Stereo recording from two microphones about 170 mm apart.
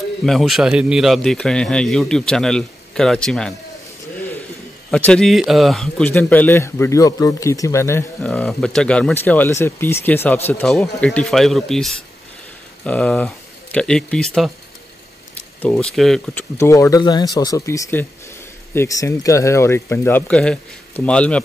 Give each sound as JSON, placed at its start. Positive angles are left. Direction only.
{"t": 0.2, "sound": "a man's voice", "side_deg": 0}
{"t": 4.9, "sound": "speech", "side_deg": 5}
{"t": 8.3, "sound": "speech", "side_deg": 5}
{"t": 16.3, "sound": "speech", "side_deg": 15}